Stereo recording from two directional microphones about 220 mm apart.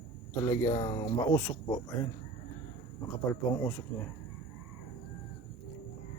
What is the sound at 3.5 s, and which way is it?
Speech, 15° left (ahead or behind).